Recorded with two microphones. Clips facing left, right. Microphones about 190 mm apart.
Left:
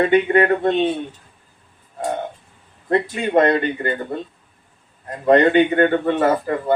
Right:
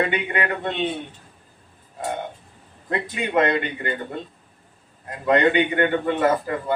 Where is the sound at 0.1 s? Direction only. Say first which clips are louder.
Left 10 dB; 40° left (ahead or behind).